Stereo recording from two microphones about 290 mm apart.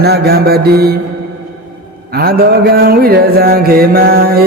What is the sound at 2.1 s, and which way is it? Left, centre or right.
Mantra, right.